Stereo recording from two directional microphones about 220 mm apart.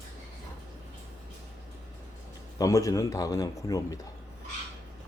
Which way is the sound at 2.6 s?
15° left (ahead or behind).